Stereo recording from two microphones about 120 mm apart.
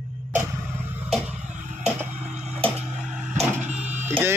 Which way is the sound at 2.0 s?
15° right (ahead or behind).